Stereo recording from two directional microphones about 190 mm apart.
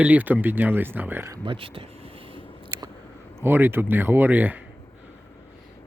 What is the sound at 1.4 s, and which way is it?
Speech, 25° right (ahead or behind).